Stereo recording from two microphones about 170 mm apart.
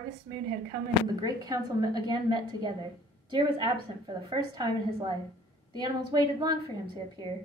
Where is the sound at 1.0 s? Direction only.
20° right (ahead or behind).